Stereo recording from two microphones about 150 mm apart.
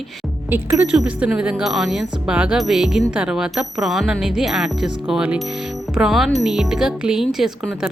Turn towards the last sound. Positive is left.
turn(degrees=-5)  # may be behind; listen again after turning